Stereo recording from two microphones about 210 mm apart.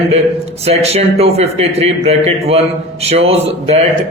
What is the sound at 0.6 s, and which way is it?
A man's voice, 30° right (ahead or behind).